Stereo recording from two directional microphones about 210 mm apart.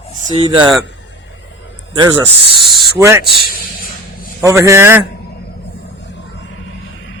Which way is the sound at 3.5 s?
45° left (ahead or behind).